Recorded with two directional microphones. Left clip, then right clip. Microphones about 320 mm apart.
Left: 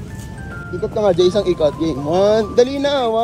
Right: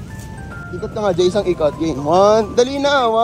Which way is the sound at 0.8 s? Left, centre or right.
Centre.